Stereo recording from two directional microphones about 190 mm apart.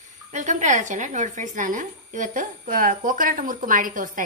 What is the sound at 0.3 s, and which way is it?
Speech, 40° right (ahead or behind).